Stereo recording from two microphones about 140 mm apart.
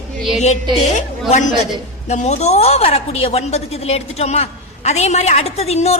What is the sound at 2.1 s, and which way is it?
A woman's voice, 55° left (ahead or behind).